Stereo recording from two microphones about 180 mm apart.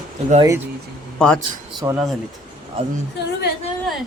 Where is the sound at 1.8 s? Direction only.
20° right (ahead or behind).